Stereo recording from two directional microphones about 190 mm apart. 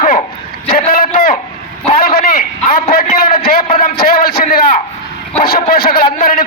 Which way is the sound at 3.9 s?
55° left (ahead or behind).